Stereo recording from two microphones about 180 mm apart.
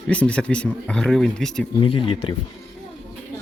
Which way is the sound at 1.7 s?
30° left (ahead or behind).